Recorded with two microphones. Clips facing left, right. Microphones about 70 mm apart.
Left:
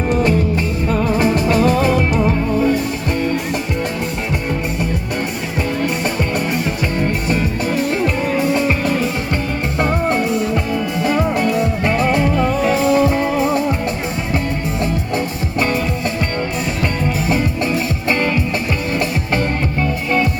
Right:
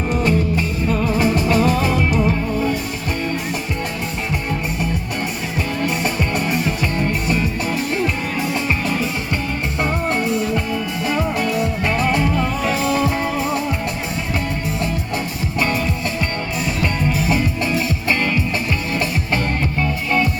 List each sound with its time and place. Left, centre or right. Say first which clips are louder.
1.2 s music: left 1 dB; left
8.5 s music: left 4 dB; left
11.3 s music: left 3 dB; left